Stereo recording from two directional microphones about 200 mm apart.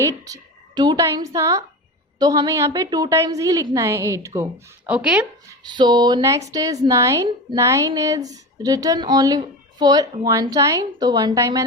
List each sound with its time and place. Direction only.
0.0 s a woman's voice: 15° right (ahead or behind)
5.6 s speech: 20° right (ahead or behind)